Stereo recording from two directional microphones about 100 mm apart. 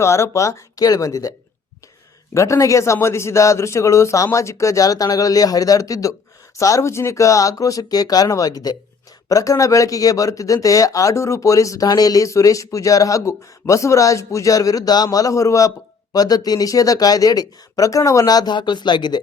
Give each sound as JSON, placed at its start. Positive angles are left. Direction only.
{"t": 0.0, "sound": "speech", "side_deg": 30}
{"t": 2.3, "sound": "speech", "side_deg": 30}